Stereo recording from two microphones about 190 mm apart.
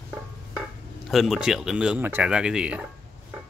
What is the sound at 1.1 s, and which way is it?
Speech, centre (ahead or behind).